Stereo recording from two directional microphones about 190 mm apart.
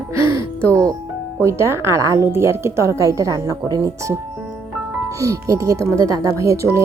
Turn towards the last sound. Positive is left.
turn(degrees=-15)  # may be behind; listen again after turning